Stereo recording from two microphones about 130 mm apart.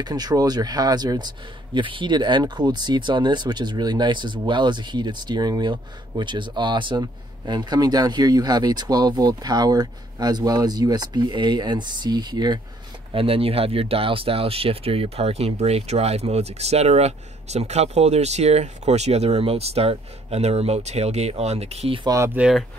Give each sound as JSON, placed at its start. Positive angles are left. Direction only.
{"t": 0.0, "sound": "a man's voice", "side_deg": -30}
{"t": 13.1, "sound": "speech", "side_deg": -45}
{"t": 22.0, "sound": "speech", "side_deg": -25}
{"t": 22.3, "sound": "speech", "side_deg": -10}